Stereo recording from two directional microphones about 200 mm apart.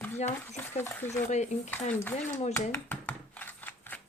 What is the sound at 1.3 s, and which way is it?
Speech, 35° left (ahead or behind).